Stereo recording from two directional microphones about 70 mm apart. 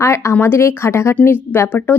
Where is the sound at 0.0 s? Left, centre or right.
Left.